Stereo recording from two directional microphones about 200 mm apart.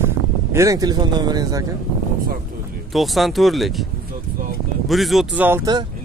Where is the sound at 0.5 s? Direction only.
15° right (ahead or behind).